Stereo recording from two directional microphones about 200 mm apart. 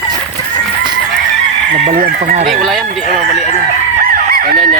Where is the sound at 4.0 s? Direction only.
45° right (ahead or behind).